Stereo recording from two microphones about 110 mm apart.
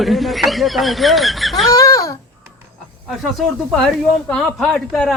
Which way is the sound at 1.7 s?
30° left (ahead or behind).